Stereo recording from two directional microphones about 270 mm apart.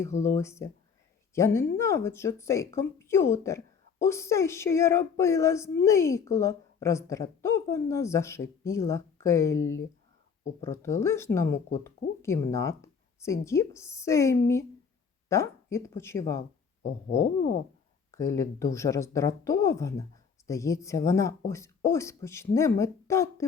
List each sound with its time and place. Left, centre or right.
0.2 s speech: centre
9.6 s speech: left
10.6 s speech: centre
18.1 s speech: centre